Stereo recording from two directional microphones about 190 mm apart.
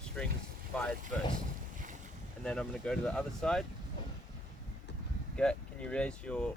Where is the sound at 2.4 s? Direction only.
5° left (ahead or behind).